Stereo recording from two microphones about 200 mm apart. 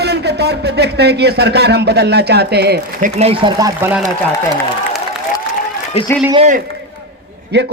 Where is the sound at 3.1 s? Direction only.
30° right (ahead or behind).